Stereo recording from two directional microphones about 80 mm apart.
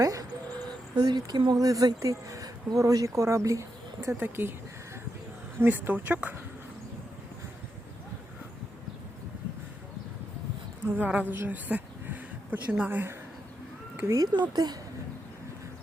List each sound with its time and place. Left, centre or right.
0.0 s speech: right
0.9 s speech: right
4.2 s speech: right
5.5 s speech: right
10.8 s speech: right
14.5 s speech: right